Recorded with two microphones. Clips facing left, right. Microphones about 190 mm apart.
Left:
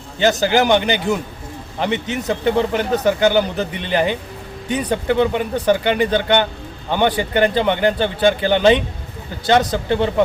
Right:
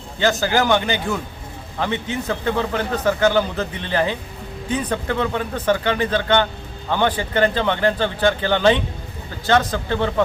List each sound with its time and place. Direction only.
0.2 s speech: 20° left (ahead or behind)